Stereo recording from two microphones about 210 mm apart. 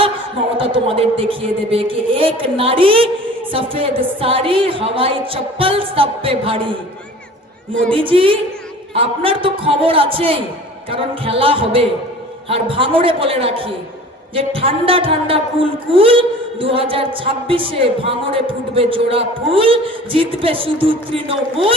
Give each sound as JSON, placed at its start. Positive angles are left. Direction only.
{"t": 0.5, "sound": "a woman's voice", "side_deg": -25}
{"t": 7.9, "sound": "a woman's voice", "side_deg": -25}